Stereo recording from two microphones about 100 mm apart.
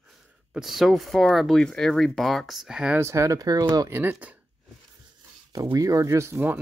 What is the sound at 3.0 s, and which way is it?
Speech, 30° right (ahead or behind).